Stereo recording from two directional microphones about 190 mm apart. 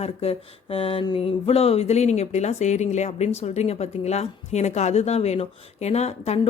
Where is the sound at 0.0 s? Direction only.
30° left (ahead or behind).